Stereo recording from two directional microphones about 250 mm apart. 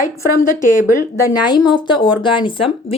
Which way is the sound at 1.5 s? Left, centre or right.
Centre.